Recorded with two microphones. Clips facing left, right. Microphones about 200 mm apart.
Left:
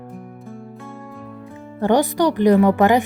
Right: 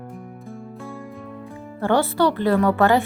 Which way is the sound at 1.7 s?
15° left (ahead or behind).